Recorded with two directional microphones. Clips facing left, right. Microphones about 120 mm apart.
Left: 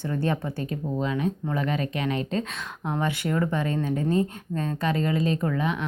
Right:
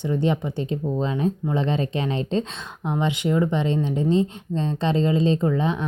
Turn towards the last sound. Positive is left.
turn(degrees=-30)  # may be behind; listen again after turning